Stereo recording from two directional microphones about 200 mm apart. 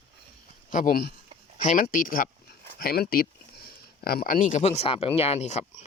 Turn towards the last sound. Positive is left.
turn(degrees=35)  # may be behind; listen again after turning